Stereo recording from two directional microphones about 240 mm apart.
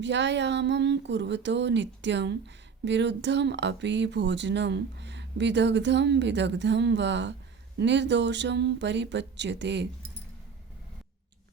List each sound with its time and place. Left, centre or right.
0.0 s speech: right